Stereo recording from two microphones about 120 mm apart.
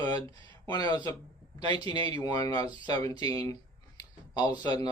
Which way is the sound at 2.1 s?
30° left (ahead or behind).